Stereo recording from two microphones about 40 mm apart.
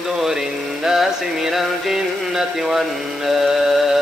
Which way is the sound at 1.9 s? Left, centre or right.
Centre.